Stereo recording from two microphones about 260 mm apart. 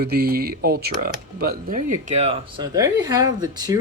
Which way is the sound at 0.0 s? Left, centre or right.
Right.